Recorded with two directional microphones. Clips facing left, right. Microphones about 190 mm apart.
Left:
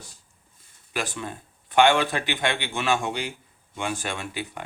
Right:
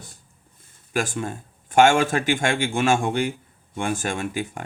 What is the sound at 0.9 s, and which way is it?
Speech, 45° right (ahead or behind).